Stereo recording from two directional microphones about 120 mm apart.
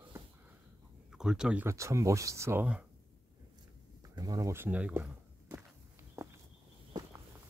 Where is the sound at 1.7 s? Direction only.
25° right (ahead or behind).